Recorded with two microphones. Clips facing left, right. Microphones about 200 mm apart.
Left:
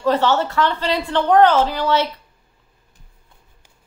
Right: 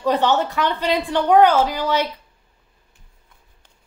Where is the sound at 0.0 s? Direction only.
15° right (ahead or behind).